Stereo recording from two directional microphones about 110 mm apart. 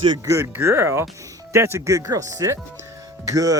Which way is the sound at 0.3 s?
25° right (ahead or behind).